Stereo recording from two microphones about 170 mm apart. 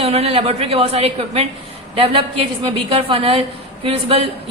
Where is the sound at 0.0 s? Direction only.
35° right (ahead or behind).